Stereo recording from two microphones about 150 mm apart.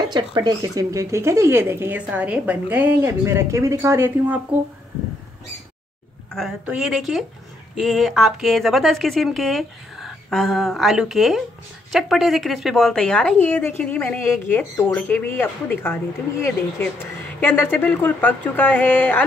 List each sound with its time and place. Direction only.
0.1 s speech: 30° right (ahead or behind)
6.3 s a woman's voice: 5° right (ahead or behind); by 16.0 s 15° left (ahead or behind)
17.4 s a woman's voice: 15° left (ahead or behind)